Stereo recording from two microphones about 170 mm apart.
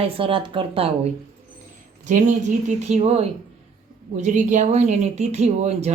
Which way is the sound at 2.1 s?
45° right (ahead or behind).